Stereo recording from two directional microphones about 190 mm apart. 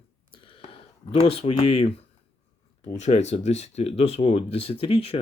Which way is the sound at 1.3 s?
30° left (ahead or behind).